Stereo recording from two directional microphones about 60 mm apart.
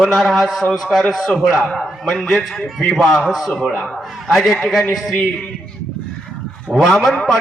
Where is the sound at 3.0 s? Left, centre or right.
Centre.